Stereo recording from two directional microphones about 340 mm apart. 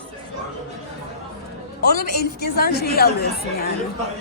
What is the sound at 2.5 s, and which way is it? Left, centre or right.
A woman's voice, left.